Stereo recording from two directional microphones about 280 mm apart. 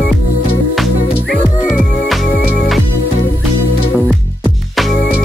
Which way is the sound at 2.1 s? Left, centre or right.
Centre.